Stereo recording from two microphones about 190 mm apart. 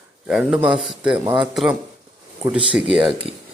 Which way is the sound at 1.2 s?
20° right (ahead or behind).